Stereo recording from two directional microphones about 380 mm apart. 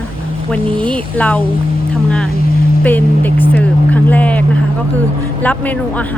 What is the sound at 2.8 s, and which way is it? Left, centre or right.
Speech, centre.